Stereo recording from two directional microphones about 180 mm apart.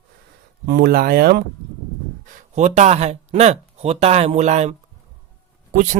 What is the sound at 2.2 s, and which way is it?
Speech, 40° right (ahead or behind).